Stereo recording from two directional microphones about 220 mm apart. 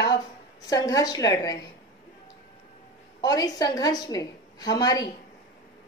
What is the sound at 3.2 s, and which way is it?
A woman's voice, 15° left (ahead or behind).